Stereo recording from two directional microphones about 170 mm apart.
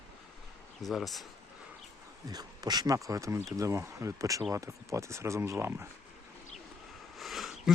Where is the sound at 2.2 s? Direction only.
25° right (ahead or behind).